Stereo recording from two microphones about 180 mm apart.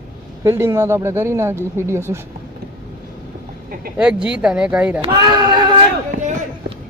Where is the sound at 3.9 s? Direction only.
5° right (ahead or behind).